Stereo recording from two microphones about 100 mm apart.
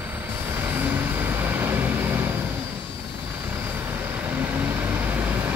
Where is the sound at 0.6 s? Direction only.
20° right (ahead or behind).